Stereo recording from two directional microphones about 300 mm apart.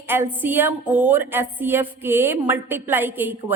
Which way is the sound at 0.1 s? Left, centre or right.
Centre.